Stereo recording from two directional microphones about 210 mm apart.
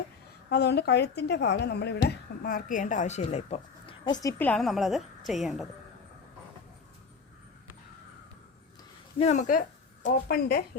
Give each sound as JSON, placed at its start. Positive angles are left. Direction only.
{"t": 0.5, "sound": "a woman's voice", "side_deg": 50}
{"t": 9.1, "sound": "a woman's voice", "side_deg": 35}